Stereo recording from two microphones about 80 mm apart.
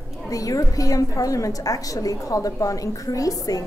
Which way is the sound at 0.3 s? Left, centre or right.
Left.